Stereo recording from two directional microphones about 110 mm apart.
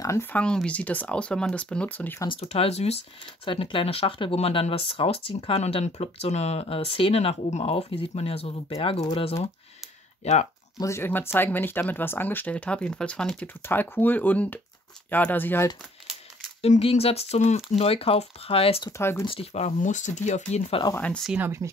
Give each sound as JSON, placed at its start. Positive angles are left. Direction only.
{"t": 0.0, "sound": "speech", "side_deg": 25}
{"t": 0.3, "sound": "speech", "side_deg": 10}
{"t": 2.2, "sound": "speech", "side_deg": 65}
{"t": 3.4, "sound": "speech", "side_deg": 50}
{"t": 10.2, "sound": "speech", "side_deg": 90}
{"t": 10.8, "sound": "speech", "side_deg": 25}
{"t": 13.7, "sound": "speech", "side_deg": 20}
{"t": 16.6, "sound": "speech", "side_deg": 75}
{"t": 18.9, "sound": "speech", "side_deg": 25}
{"t": 19.2, "sound": "speech", "side_deg": 60}
{"t": 20.9, "sound": "speech", "side_deg": 15}
{"t": 21.4, "sound": "speech", "side_deg": -25}